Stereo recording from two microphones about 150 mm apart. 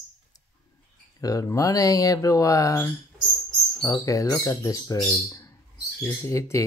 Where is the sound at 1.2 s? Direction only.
25° left (ahead or behind).